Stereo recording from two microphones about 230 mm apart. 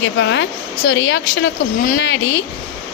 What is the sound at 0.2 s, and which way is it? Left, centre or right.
A woman's voice, left.